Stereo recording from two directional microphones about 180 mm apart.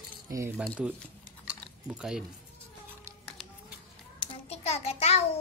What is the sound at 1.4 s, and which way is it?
Chewing, 5° right (ahead or behind).